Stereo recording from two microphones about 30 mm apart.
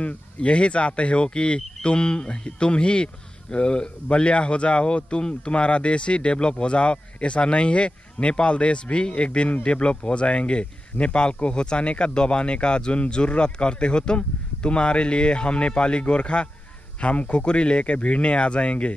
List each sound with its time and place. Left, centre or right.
0.0 s speech: left